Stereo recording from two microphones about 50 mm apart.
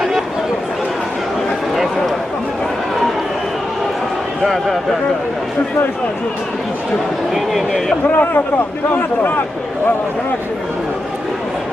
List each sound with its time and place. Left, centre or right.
1.7 s a sound: centre
4.4 s a man's voice: centre
7.3 s speech: centre
8.0 s a man's voice: left